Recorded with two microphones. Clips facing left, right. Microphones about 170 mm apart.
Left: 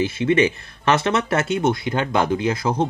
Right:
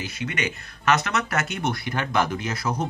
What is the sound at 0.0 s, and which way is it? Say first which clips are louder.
Speech: left 12 dB; 25° left (ahead or behind).